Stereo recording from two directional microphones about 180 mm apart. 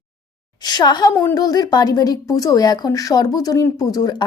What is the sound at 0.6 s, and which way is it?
A woman's voice, 25° left (ahead or behind).